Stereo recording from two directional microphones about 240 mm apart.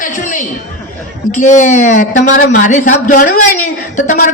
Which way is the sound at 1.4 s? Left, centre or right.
Left.